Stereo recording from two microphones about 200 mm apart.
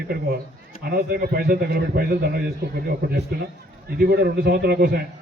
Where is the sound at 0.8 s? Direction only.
50° right (ahead or behind).